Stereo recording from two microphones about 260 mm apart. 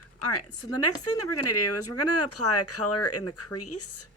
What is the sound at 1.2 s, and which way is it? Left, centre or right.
Speech, left.